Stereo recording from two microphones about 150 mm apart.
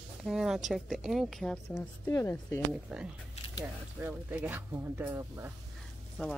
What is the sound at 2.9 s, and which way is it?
Speech, 5° right (ahead or behind).